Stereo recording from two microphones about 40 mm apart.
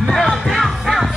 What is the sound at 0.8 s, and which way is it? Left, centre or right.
Music, centre.